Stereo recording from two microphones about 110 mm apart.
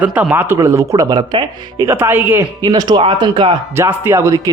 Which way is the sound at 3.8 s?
20° right (ahead or behind).